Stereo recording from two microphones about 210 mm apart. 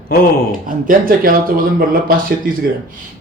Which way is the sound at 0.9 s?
45° right (ahead or behind).